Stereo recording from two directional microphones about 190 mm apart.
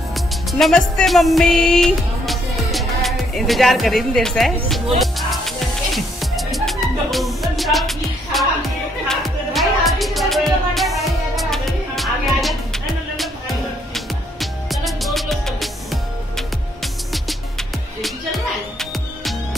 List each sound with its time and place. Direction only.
0.1 s music: centre (ahead or behind)